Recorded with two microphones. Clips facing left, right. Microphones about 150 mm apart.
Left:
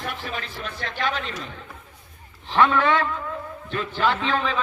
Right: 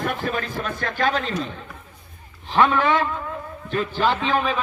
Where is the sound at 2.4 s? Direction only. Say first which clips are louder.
Right 1 dB; 15° right (ahead or behind).